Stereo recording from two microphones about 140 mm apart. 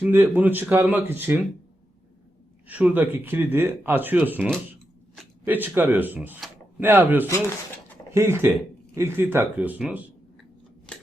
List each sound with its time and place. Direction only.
0.0 s speech: 15° right (ahead or behind)
2.6 s speech: 10° right (ahead or behind)